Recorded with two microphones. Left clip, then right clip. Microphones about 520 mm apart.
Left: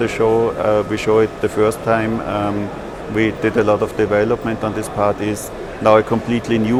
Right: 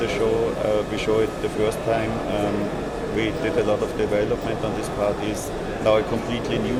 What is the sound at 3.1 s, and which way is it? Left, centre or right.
Speech, left.